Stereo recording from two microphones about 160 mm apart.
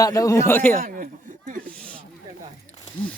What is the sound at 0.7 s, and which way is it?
Speech, 60° right (ahead or behind).